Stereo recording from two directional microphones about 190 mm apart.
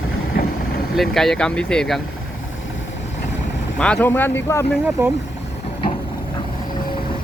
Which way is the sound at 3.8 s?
5° left (ahead or behind).